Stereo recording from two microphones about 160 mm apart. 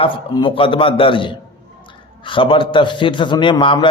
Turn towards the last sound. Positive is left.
turn(degrees=30)  # may be behind; listen again after turning